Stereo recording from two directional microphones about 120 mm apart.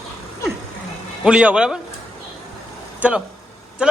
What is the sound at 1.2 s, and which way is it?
Speech, 10° right (ahead or behind).